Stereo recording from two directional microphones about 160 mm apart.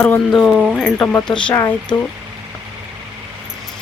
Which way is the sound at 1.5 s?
15° left (ahead or behind).